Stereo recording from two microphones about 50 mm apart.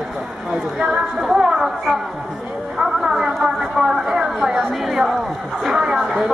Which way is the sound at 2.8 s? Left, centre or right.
Centre.